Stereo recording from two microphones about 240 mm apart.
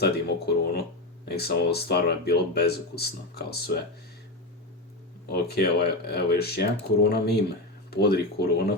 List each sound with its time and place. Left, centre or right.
0.0 s speech: left
5.3 s speech: left